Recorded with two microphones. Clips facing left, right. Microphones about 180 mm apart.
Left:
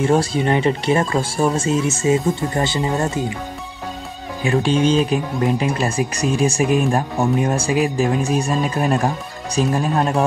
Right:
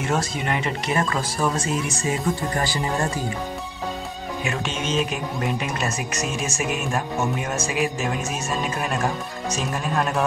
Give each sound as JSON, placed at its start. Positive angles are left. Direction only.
{"t": 0.0, "sound": "speech", "side_deg": 30}
{"t": 4.4, "sound": "speech", "side_deg": 35}